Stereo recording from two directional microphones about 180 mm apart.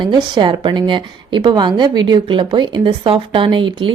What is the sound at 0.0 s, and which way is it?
A woman's voice, 25° right (ahead or behind).